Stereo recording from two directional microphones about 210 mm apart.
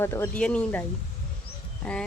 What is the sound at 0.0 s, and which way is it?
A woman's voice, 10° left (ahead or behind).